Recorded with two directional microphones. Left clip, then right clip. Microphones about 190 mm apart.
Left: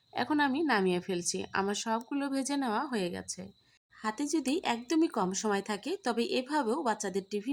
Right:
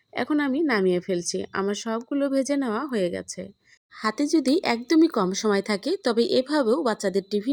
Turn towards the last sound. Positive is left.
turn(degrees=-25)  # may be behind; listen again after turning